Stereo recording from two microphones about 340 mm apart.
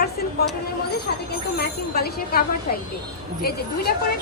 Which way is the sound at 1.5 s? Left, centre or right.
Left.